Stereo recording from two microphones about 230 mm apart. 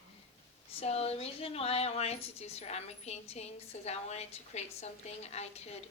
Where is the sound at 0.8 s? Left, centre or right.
Left.